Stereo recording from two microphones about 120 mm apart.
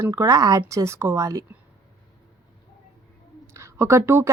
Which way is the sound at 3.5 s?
25° right (ahead or behind).